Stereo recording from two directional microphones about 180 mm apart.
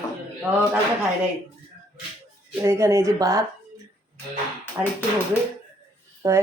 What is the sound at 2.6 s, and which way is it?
Speech, 15° right (ahead or behind).